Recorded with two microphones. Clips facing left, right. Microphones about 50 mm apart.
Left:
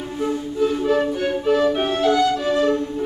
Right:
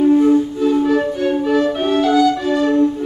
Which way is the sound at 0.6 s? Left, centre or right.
Centre.